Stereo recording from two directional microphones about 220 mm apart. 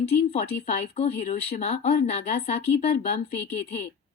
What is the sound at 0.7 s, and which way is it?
Speech, 30° left (ahead or behind).